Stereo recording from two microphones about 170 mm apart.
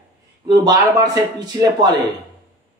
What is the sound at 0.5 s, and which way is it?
A man's voice, 20° right (ahead or behind).